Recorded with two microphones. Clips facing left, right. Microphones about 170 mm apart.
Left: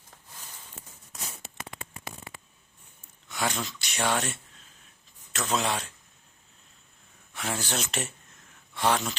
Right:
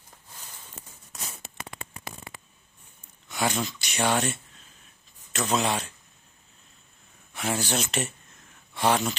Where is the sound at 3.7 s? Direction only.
Centre (ahead or behind).